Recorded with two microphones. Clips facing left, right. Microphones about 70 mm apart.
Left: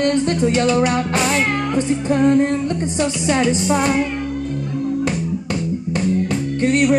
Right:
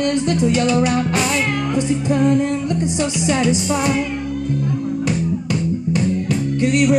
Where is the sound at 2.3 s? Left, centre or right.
Left.